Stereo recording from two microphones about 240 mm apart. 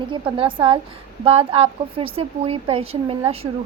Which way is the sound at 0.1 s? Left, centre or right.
Right.